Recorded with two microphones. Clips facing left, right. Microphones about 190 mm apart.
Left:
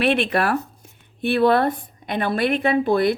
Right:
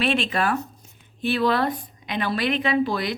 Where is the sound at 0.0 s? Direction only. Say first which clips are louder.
Left 3 dB; 60° left (ahead or behind).